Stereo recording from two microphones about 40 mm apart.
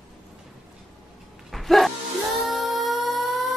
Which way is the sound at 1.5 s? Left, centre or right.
Centre.